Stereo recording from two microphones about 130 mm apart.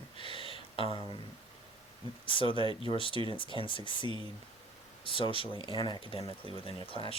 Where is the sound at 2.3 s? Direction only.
40° left (ahead or behind).